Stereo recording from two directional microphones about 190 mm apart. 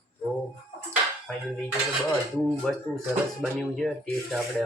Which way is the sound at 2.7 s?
Centre (ahead or behind).